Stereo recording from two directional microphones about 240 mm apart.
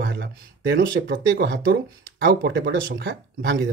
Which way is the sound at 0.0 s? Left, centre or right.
Right.